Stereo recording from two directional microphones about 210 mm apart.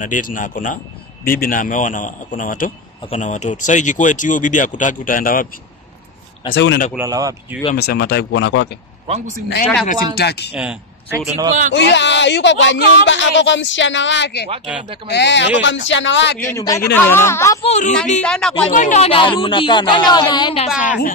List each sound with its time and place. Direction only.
0.0 s speech: 40° left (ahead or behind)
6.5 s speech: 55° left (ahead or behind)
7.0 s speech: 15° right (ahead or behind)
7.7 s speech: 50° left (ahead or behind)
9.0 s a man's voice: 30° right (ahead or behind)
10.1 s speech: 50° left (ahead or behind)
10.5 s speech: 5° right (ahead or behind)
11.7 s speech: 55° left (ahead or behind)
16.4 s speech: 15° left (ahead or behind)
17.6 s speech: 35° left (ahead or behind)
18.2 s speech: 5° left (ahead or behind)
18.7 s speech: 35° left (ahead or behind)